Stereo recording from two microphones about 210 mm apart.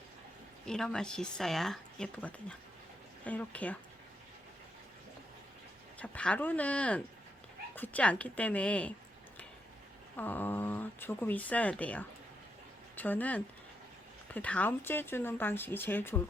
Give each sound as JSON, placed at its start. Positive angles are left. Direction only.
{"t": 0.7, "sound": "speech", "side_deg": 5}
{"t": 6.0, "sound": "speech", "side_deg": 5}
{"t": 10.2, "sound": "speech", "side_deg": 10}